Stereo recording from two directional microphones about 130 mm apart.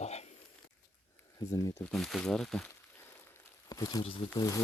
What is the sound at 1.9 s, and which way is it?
Speech, 5° left (ahead or behind).